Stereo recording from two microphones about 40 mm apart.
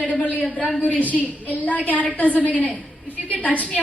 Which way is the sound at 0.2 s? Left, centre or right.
Left.